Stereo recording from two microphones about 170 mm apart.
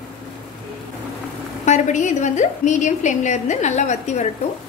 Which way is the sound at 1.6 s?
45° left (ahead or behind).